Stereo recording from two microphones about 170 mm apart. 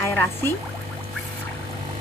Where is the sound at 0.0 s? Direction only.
15° left (ahead or behind).